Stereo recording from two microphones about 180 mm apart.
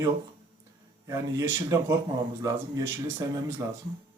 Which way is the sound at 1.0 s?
15° right (ahead or behind).